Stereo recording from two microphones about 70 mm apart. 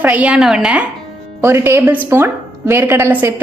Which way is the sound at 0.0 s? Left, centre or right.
Right.